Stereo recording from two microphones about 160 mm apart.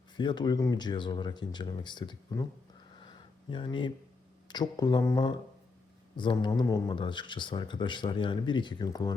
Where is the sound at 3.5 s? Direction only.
30° left (ahead or behind).